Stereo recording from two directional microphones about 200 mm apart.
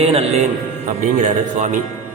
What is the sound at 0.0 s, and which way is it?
A man's voice, 30° right (ahead or behind).